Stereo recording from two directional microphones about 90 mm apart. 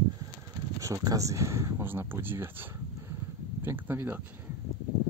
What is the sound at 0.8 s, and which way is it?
Speech, 35° right (ahead or behind).